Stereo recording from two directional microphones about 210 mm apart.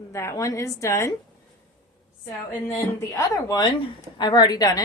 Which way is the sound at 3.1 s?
20° left (ahead or behind).